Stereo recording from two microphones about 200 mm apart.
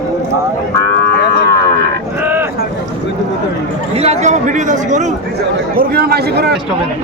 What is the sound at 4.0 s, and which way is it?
Speech, 35° right (ahead or behind).